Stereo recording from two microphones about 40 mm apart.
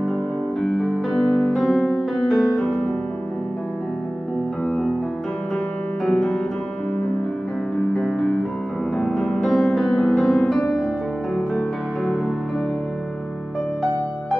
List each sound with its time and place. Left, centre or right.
1.1 s music: centre
6.0 s music: left
7.8 s music: left
9.4 s music: centre
11.5 s music: right